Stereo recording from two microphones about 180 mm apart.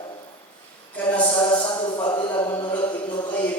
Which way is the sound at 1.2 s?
30° left (ahead or behind).